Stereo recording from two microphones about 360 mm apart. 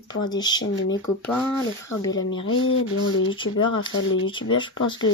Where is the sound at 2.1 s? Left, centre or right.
Left.